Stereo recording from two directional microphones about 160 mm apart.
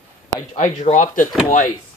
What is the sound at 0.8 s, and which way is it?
Speech, 50° left (ahead or behind).